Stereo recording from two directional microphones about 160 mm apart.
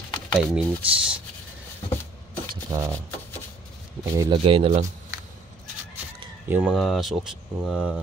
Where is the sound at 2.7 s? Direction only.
20° right (ahead or behind).